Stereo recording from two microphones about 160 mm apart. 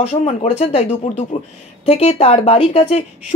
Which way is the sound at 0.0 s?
45° left (ahead or behind).